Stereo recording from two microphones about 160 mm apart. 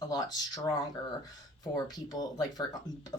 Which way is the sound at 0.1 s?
25° left (ahead or behind).